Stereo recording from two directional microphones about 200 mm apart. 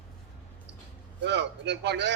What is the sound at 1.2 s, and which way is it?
Speech, 60° right (ahead or behind).